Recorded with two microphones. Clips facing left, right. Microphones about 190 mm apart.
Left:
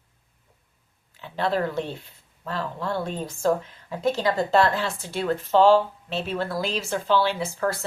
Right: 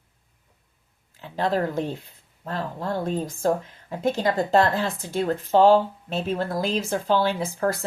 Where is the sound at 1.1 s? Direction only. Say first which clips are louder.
Right 1 dB; 40° right (ahead or behind).